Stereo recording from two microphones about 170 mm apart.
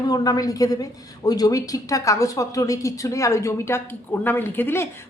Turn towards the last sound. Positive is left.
turn(degrees=15)  # may be behind; listen again after turning